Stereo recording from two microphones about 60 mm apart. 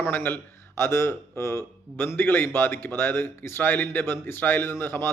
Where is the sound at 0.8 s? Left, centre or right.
Left.